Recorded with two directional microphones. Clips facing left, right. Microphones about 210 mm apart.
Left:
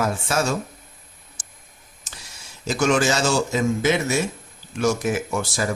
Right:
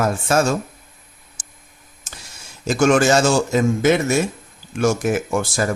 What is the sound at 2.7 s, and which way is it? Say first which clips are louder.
Speech: right 5 dB; 50° right (ahead or behind).